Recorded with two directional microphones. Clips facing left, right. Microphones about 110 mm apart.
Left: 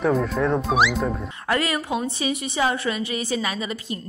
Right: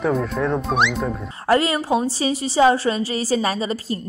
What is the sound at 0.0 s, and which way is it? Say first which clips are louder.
Speech: even; centre (ahead or behind).